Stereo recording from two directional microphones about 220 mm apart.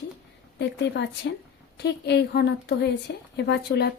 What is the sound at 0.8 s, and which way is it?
A woman's voice, 55° left (ahead or behind).